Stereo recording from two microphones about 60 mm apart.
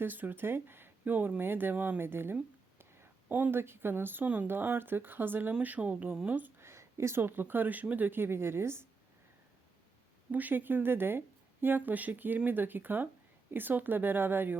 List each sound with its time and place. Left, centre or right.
0.0 s speech: right
2.0 s a sound: right
3.5 s speech: right
5.6 s speech: right
6.6 s speech: right
10.3 s speech: right